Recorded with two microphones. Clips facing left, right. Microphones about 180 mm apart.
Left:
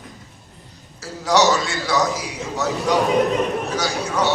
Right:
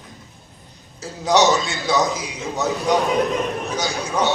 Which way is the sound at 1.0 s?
20° right (ahead or behind).